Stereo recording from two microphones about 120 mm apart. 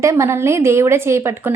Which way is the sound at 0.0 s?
25° right (ahead or behind).